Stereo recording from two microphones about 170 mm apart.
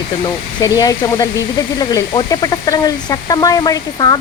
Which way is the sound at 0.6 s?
20° left (ahead or behind).